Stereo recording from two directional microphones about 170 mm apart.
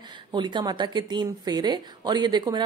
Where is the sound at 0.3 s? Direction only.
25° right (ahead or behind).